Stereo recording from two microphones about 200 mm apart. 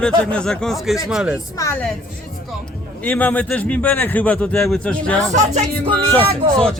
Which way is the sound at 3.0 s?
10° left (ahead or behind).